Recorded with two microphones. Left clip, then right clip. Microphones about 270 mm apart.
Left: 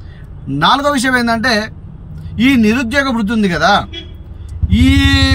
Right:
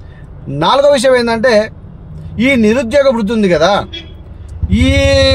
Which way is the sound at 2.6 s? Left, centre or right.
Right.